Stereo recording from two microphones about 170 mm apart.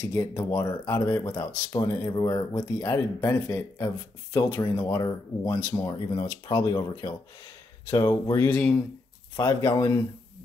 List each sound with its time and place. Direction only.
0.0 s speech: 15° left (ahead or behind)
9.4 s speech: 15° left (ahead or behind)